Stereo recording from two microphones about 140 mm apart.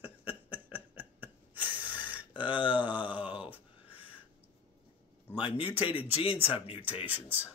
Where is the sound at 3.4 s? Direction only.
10° right (ahead or behind).